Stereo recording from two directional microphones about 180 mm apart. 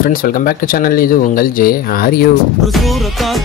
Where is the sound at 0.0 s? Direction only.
50° left (ahead or behind).